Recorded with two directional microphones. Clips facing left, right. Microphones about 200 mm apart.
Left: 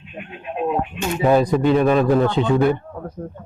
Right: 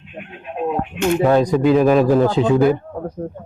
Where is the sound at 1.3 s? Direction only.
5° left (ahead or behind).